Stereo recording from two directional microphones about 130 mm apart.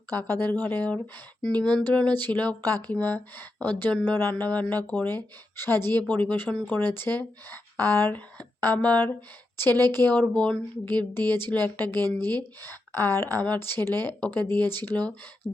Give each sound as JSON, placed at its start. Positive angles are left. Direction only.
{"t": 0.1, "sound": "speech", "side_deg": 15}